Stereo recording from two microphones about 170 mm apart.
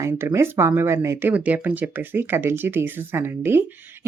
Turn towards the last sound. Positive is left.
turn(degrees=-15)  # may be behind; listen again after turning